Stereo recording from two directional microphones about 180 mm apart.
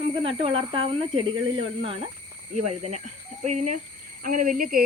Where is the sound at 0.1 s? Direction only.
30° right (ahead or behind).